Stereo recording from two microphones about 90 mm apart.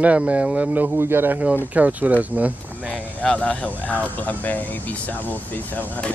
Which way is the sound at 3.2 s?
15° left (ahead or behind).